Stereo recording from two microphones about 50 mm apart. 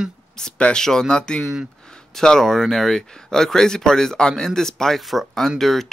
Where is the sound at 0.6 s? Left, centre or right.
Left.